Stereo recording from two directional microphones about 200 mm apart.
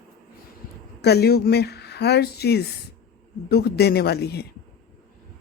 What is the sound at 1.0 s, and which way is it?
Speech, 55° left (ahead or behind).